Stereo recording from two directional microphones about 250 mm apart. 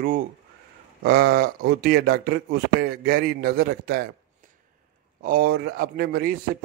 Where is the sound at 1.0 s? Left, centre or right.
Right.